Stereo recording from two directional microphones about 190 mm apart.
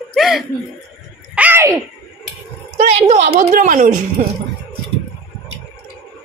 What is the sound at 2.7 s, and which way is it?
A child's voice, 35° right (ahead or behind).